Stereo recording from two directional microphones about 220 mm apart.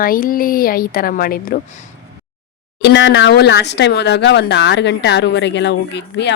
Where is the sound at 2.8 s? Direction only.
50° left (ahead or behind).